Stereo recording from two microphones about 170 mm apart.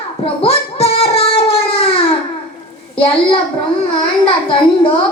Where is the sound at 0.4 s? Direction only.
35° left (ahead or behind).